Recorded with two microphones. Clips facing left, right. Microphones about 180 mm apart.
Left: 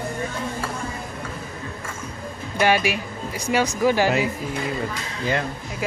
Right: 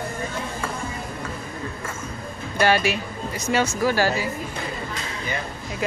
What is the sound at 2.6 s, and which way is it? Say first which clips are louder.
Speech: even; 10° left (ahead or behind).